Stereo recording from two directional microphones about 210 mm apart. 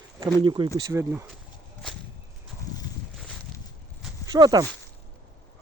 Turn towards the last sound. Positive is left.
turn(degrees=-20)  # may be behind; listen again after turning